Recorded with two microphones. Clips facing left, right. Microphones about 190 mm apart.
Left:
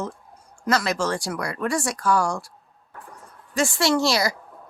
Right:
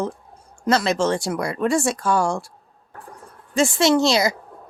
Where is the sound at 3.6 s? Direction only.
20° right (ahead or behind).